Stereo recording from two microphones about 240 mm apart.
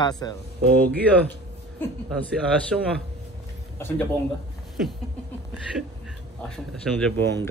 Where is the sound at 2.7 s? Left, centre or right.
Centre.